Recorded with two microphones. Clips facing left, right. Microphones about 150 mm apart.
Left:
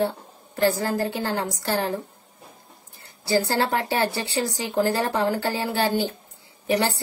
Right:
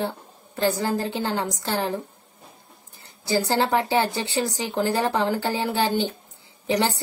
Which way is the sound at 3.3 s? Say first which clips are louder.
Even; 20° right (ahead or behind).